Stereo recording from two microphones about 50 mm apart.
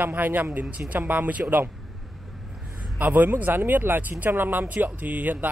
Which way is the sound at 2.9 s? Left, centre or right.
Right.